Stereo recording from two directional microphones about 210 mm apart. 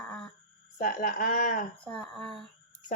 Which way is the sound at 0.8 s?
40° left (ahead or behind).